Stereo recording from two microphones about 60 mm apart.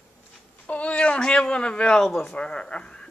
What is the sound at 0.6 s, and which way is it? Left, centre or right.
Speech, left.